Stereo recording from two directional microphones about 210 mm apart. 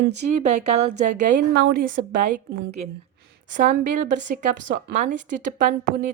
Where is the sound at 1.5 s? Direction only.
50° right (ahead or behind).